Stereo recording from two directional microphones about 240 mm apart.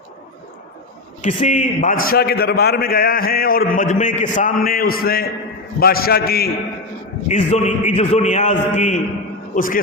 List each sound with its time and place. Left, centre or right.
1.2 s a man's voice: left
7.3 s a man's voice: left